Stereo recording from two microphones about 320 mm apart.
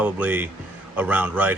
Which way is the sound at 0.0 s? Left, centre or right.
Centre.